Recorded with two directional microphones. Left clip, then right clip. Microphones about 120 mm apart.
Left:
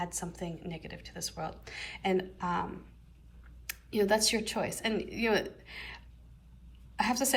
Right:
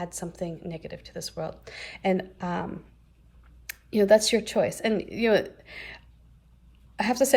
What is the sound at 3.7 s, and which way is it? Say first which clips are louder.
A woman's voice: right 9 dB; 50° right (ahead or behind).